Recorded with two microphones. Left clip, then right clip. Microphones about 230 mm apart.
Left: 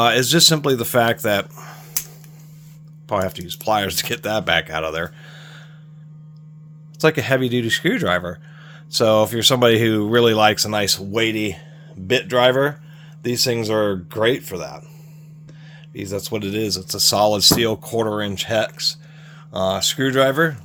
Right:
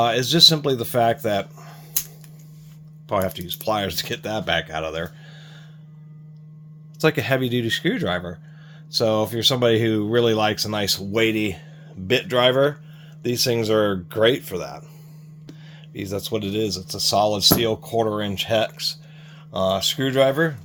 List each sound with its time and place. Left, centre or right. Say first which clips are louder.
0.0 s speech: left 1 dB; left
3.1 s speech: left 1 dB; centre
7.0 s speech: left 3 dB; centre
16.0 s speech: left 1 dB; centre